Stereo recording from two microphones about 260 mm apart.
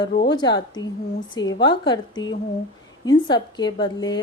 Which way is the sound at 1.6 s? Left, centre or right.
Centre.